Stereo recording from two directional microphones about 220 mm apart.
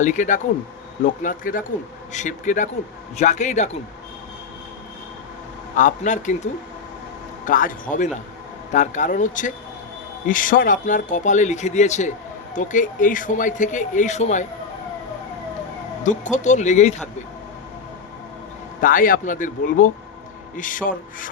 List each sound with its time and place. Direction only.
0.0 s speech: 35° left (ahead or behind)
5.7 s speech: 35° left (ahead or behind)
16.0 s speech: 35° left (ahead or behind)
18.8 s speech: 40° left (ahead or behind)